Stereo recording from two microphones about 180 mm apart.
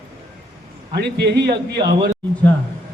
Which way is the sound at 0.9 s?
65° right (ahead or behind).